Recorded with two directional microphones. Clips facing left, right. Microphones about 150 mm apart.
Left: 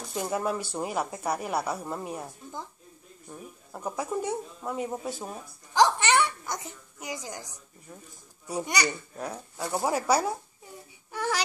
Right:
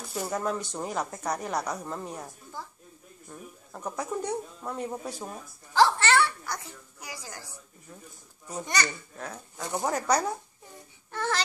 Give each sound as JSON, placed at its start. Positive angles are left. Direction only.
{"t": 0.2, "sound": "speech", "side_deg": 10}
{"t": 5.7, "sound": "a sound", "side_deg": 15}
{"t": 8.5, "sound": "speech", "side_deg": 10}
{"t": 11.1, "sound": "babbling", "side_deg": 10}